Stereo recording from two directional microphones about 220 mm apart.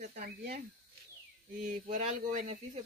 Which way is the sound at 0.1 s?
45° right (ahead or behind).